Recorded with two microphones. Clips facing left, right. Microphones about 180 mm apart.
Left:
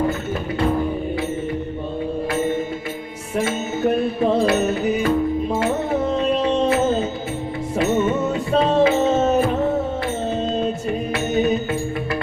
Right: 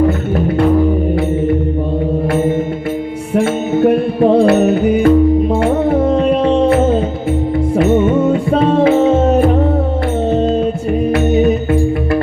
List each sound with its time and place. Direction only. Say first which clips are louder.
3.3 s music: right 8 dB; 55° right (ahead or behind)
7.8 s music: right 6 dB; 55° right (ahead or behind)